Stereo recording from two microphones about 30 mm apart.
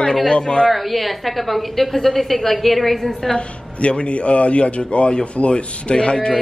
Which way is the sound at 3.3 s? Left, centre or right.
Left.